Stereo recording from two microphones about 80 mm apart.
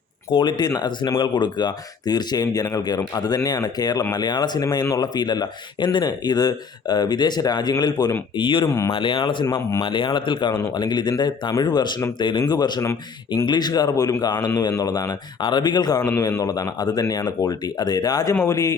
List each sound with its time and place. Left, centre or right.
0.3 s speech: left
8.4 s speech: left
9.8 s speech: left
10.8 s speech: left
12.2 s speech: left
13.9 s speech: left